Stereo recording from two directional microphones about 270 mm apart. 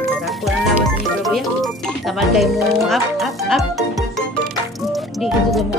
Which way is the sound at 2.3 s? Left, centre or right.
Centre.